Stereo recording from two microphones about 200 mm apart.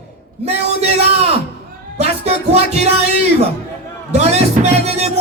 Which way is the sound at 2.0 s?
30° right (ahead or behind).